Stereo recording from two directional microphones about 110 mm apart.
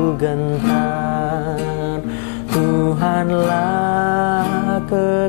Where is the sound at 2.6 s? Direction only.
15° left (ahead or behind).